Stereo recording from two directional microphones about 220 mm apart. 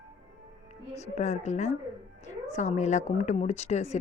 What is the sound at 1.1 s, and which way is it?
Speech, 30° left (ahead or behind).